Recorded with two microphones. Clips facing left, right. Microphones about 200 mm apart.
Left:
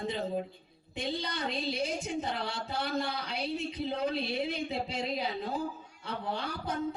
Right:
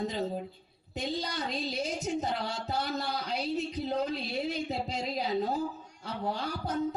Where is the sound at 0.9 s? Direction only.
40° right (ahead or behind).